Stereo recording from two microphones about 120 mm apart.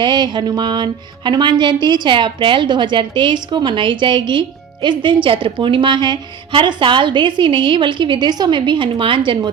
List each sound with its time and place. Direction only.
0.0 s speech: 35° right (ahead or behind)